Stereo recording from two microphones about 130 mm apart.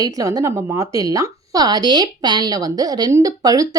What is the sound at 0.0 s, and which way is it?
A woman's voice, 25° right (ahead or behind).